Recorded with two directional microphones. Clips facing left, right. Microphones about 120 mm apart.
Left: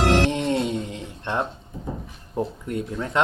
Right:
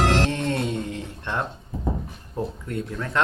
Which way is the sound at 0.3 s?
20° left (ahead or behind).